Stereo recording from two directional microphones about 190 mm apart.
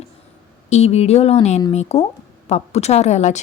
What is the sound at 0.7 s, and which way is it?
A woman's voice, 35° left (ahead or behind).